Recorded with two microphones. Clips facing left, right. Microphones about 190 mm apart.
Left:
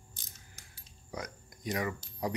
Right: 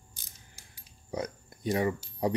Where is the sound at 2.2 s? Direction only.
30° right (ahead or behind).